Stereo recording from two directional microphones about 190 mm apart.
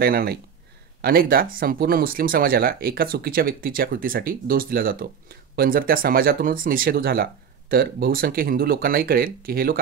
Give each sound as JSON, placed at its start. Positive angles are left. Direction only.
{"t": 0.0, "sound": "speech", "side_deg": -55}